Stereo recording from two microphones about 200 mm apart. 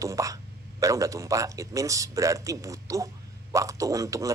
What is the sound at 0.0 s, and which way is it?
Speech, 15° right (ahead or behind).